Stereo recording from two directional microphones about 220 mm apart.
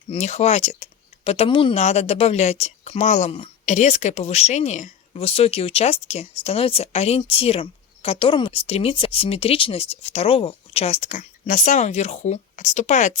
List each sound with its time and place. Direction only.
0.1 s speech: 30° left (ahead or behind)